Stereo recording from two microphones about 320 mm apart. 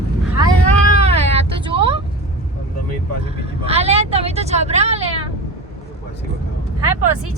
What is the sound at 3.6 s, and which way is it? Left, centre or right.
Vehicle, centre.